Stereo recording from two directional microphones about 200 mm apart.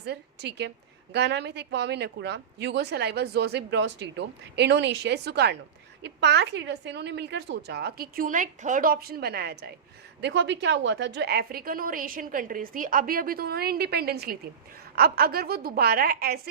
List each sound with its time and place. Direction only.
0.0 s a woman's voice: 55° right (ahead or behind)